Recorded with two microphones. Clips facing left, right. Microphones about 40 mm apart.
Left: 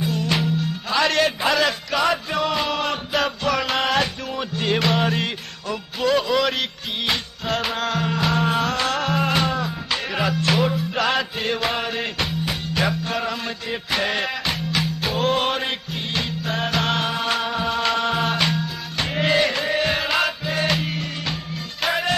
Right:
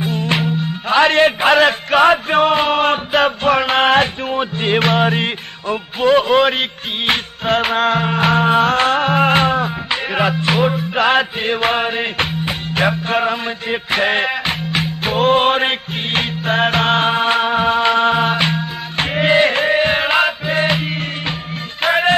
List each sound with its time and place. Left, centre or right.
0.0 s music: right